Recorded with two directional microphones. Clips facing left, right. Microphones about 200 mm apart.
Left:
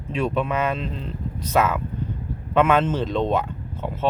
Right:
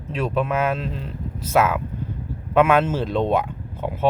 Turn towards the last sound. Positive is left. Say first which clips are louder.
# right 2 dB
turn(degrees=-10)  # may be behind; listen again after turning